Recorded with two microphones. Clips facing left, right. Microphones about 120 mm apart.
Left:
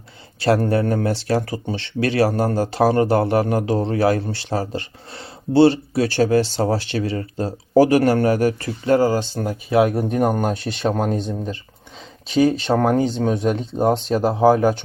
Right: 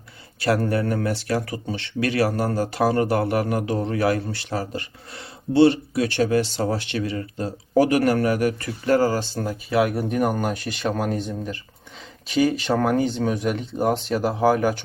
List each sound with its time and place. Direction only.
0.3 s speech: 30° left (ahead or behind)
9.0 s speech: 20° left (ahead or behind)